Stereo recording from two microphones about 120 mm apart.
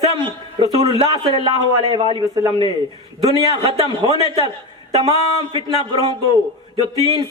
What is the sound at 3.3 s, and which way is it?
Speech, 40° right (ahead or behind).